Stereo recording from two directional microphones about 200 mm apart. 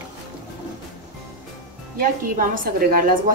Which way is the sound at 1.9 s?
45° right (ahead or behind).